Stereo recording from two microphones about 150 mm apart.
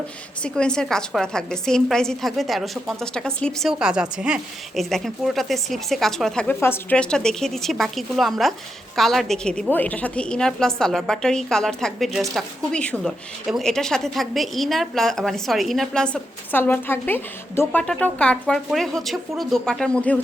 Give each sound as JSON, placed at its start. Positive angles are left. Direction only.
{"t": 0.4, "sound": "a woman's voice", "side_deg": 5}